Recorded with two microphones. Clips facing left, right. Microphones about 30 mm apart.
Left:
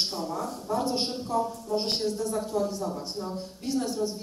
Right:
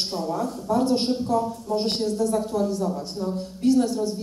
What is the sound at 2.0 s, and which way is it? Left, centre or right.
Speech, left.